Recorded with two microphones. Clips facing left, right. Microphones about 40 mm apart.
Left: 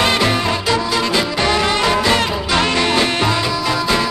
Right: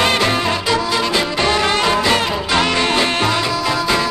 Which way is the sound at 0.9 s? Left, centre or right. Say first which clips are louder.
Even; centre.